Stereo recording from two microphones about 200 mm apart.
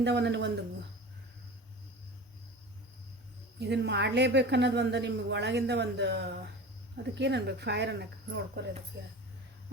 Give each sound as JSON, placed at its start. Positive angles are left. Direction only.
{"t": 0.0, "sound": "a woman's voice", "side_deg": -60}
{"t": 3.6, "sound": "a woman's voice", "side_deg": -60}